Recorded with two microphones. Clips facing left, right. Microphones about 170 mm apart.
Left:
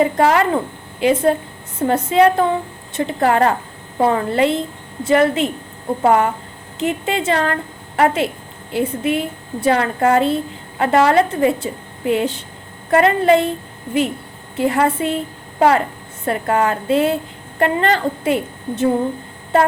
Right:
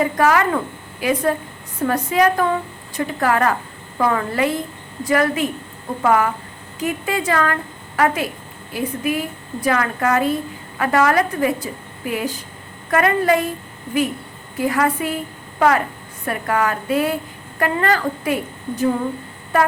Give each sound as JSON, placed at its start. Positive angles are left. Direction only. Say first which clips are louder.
{"t": 0.0, "sound": "a woman's voice", "louder": "left 2 dB", "side_deg": 25}
{"t": 14.5, "sound": "a woman's voice", "louder": "left 2 dB", "side_deg": 25}